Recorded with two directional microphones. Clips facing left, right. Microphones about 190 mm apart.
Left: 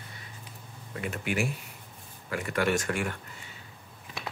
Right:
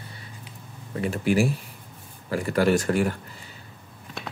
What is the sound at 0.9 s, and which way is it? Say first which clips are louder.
Speech: right 9 dB; 35° right (ahead or behind).